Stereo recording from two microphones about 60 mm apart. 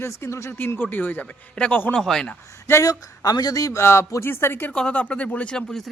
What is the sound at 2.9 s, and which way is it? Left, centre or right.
Speech, left.